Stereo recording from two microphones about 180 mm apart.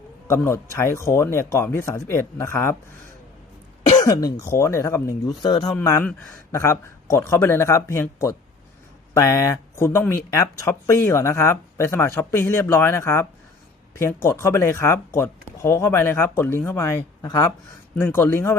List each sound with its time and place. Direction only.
0.3 s speech: 15° left (ahead or behind)
3.9 s speech: 20° left (ahead or behind)
5.7 s speech: 15° left (ahead or behind)